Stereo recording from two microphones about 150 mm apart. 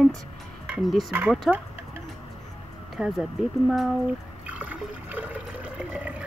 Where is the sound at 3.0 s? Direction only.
5° right (ahead or behind).